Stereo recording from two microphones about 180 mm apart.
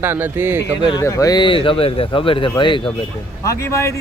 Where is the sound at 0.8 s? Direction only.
20° left (ahead or behind).